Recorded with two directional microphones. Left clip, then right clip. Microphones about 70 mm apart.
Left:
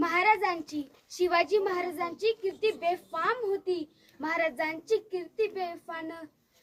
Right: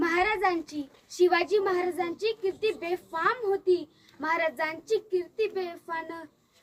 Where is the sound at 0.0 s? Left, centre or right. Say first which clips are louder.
Even; centre.